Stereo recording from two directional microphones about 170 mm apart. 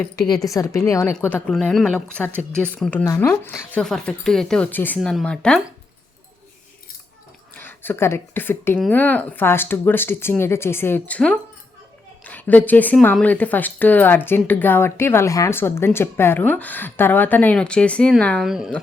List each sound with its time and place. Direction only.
0.4 s a woman's voice: 20° left (ahead or behind)
7.5 s speech: 10° left (ahead or behind)